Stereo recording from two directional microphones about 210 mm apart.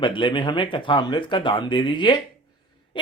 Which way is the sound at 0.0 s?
25° left (ahead or behind).